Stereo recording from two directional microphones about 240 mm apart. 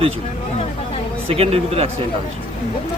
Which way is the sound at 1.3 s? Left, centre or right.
Right.